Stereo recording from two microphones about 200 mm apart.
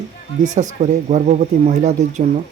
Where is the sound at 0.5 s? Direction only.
35° right (ahead or behind).